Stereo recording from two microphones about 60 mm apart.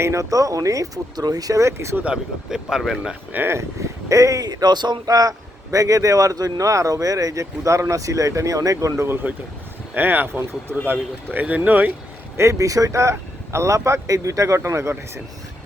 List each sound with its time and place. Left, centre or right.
0.0 s speech: right
1.6 s speech: right
2.5 s speech: centre
3.3 s speech: right
3.6 s speech: right
5.0 s speech: right
5.7 s speech: right
9.0 s speech: right
12.4 s speech: right